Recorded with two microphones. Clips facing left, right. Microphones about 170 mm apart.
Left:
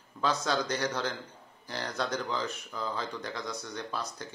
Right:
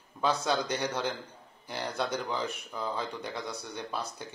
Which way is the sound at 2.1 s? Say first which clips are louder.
Even; 15° right (ahead or behind).